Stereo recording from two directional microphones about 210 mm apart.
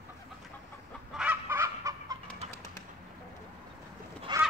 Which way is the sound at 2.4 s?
30° right (ahead or behind).